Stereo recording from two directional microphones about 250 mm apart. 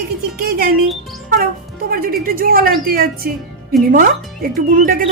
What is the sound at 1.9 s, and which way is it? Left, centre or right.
A woman's voice, right.